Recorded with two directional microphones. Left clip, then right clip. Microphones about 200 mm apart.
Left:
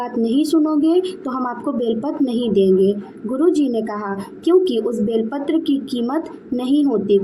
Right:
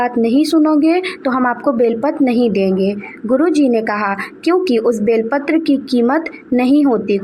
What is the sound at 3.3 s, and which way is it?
A woman's voice, 30° right (ahead or behind).